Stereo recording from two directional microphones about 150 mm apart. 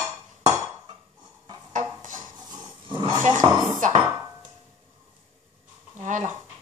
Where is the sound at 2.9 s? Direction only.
30° right (ahead or behind).